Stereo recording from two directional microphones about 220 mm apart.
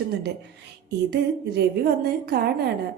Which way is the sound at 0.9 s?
50° right (ahead or behind).